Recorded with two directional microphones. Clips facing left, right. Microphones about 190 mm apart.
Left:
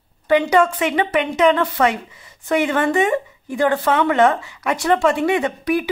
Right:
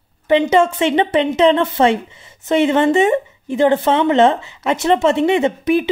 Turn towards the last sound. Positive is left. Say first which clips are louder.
# right 4 dB
turn(degrees=-25)  # may be behind; listen again after turning